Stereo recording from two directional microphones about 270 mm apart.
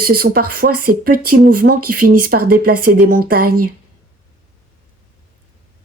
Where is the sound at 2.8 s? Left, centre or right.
Right.